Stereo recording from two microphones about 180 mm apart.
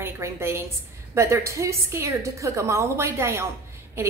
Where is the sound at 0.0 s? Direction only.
15° right (ahead or behind).